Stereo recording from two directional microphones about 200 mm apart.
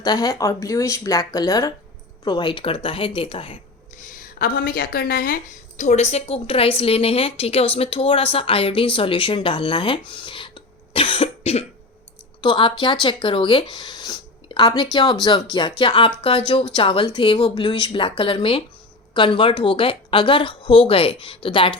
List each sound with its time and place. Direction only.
0.0 s speech: 20° left (ahead or behind)
3.9 s speech: 40° left (ahead or behind); by 10.0 s 25° left (ahead or behind)
10.1 s cough: 25° left (ahead or behind)
12.4 s speech: 25° left (ahead or behind)